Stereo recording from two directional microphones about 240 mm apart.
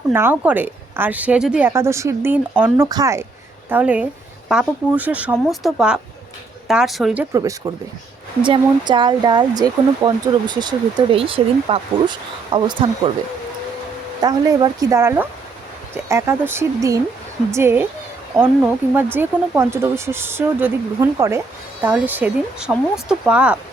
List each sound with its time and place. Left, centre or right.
0.1 s a woman's voice: centre
14.2 s a woman's voice: centre